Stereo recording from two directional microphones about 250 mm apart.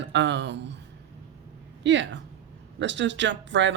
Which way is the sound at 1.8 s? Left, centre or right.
Right.